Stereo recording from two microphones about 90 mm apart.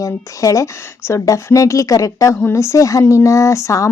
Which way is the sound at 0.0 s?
35° left (ahead or behind).